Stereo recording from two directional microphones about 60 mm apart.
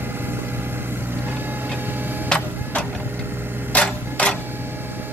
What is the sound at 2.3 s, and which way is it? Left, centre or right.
Printer, centre.